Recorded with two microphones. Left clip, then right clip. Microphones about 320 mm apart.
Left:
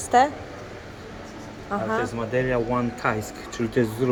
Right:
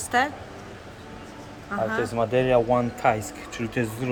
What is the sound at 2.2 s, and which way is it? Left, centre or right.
Speech, right.